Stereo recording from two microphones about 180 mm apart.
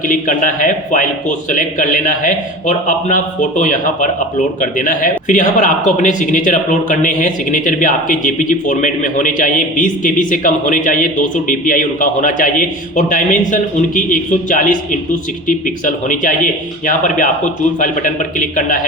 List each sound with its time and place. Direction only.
0.1 s a man's voice: 50° left (ahead or behind)